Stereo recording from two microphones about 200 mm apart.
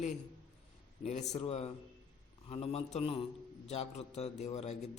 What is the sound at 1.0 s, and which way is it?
A man's voice, 35° left (ahead or behind).